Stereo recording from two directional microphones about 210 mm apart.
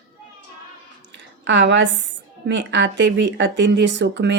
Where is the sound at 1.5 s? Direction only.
55° right (ahead or behind).